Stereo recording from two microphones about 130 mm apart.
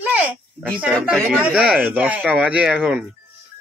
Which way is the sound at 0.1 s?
10° right (ahead or behind).